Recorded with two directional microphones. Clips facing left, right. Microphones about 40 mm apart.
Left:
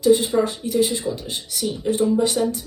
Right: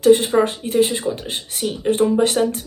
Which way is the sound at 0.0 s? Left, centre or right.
Right.